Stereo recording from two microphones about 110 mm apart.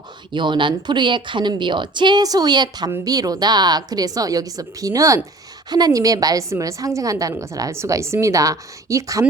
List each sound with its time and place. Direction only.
0.3 s a woman's voice: 45° right (ahead or behind); by 9.2 s 30° right (ahead or behind)